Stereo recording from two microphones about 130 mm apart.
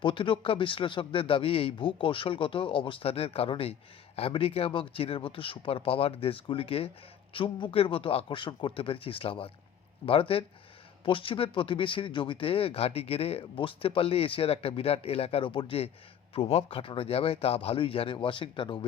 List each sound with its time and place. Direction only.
0.0 s a man's voice: 40° left (ahead or behind)